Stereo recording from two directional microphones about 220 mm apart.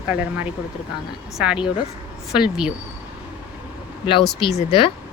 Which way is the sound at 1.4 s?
5° right (ahead or behind).